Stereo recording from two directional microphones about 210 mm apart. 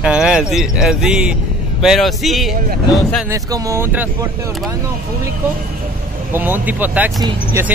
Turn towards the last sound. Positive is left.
turn(degrees=-15)  # may be behind; listen again after turning